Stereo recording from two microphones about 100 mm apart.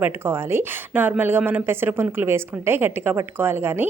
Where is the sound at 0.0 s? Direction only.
20° right (ahead or behind).